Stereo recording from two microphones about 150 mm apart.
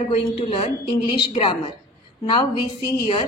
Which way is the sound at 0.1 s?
40° left (ahead or behind).